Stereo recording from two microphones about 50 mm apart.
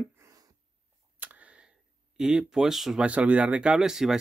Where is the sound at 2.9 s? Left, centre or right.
Right; by 4.1 s centre.